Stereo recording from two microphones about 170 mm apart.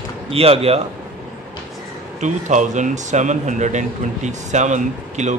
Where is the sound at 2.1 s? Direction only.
45° right (ahead or behind).